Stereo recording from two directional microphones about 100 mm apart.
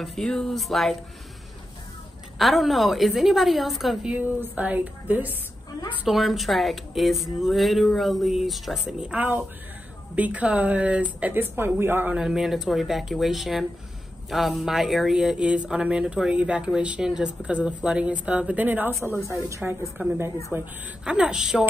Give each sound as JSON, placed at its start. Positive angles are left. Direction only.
{"t": 0.0, "sound": "speech", "side_deg": 0}
{"t": 2.3, "sound": "speech", "side_deg": 0}
{"t": 4.1, "sound": "speech", "side_deg": -15}
{"t": 6.0, "sound": "a man's voice", "side_deg": 0}
{"t": 12.2, "sound": "speech", "side_deg": -5}
{"t": 19.6, "sound": "speech", "side_deg": -5}
{"t": 20.0, "sound": "a man's voice", "side_deg": -20}
{"t": 21.0, "sound": "speech", "side_deg": -10}